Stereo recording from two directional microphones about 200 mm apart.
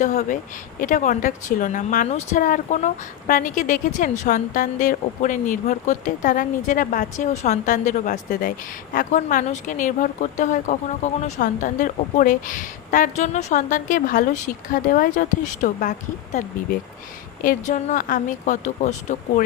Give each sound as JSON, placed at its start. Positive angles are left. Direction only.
{"t": 0.0, "sound": "a woman's voice", "side_deg": 35}
{"t": 17.4, "sound": "a woman's voice", "side_deg": 40}